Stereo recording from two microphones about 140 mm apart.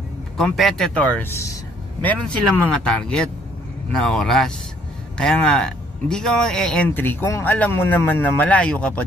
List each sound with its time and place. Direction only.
0.4 s a man's voice: centre (ahead or behind)